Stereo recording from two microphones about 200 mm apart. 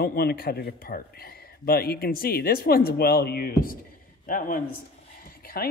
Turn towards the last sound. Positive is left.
turn(degrees=45)  # may be behind; listen again after turning